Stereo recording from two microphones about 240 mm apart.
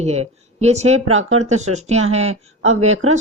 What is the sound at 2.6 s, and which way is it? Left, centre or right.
Speech, right.